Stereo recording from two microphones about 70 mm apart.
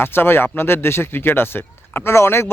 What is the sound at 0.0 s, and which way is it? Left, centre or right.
Speech, left.